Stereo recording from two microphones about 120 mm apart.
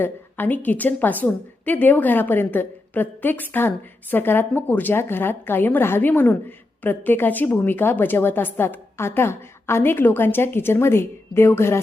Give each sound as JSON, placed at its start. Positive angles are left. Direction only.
{"t": 0.0, "sound": "a woman's voice", "side_deg": 15}